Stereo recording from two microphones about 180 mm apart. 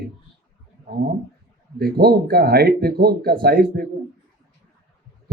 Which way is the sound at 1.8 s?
60° right (ahead or behind).